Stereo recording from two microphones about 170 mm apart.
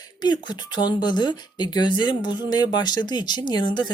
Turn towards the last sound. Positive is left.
turn(degrees=25)  # may be behind; listen again after turning